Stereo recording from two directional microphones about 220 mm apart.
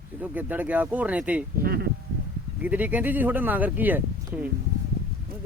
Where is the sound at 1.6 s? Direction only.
45° right (ahead or behind).